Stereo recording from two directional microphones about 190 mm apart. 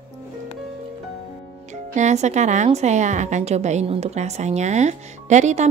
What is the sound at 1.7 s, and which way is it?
Speech, 40° right (ahead or behind).